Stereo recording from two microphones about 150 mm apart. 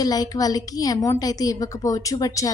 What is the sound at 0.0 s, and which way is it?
A woman's voice, 25° left (ahead or behind).